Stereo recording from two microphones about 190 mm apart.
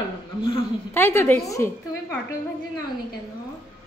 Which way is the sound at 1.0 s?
10° left (ahead or behind).